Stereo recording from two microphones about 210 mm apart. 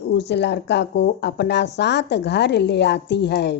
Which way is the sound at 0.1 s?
55° left (ahead or behind).